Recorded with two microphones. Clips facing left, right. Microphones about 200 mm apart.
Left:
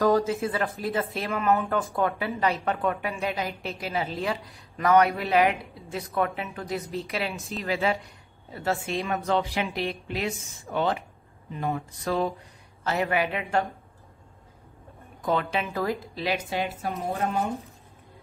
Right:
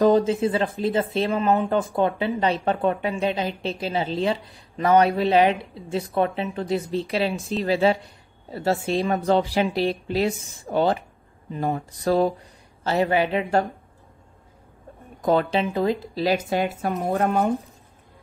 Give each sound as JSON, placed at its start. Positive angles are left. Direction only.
{"t": 0.0, "sound": "a woman's voice", "side_deg": -20}
{"t": 15.2, "sound": "a woman's voice", "side_deg": -35}
{"t": 15.6, "sound": "speech", "side_deg": -20}
{"t": 16.2, "sound": "speech", "side_deg": -45}